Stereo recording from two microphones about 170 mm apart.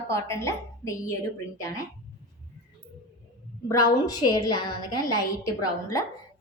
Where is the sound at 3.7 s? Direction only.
20° left (ahead or behind).